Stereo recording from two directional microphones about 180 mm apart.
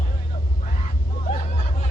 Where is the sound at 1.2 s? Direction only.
50° left (ahead or behind).